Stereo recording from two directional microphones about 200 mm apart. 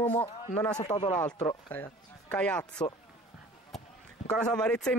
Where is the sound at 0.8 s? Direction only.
35° left (ahead or behind).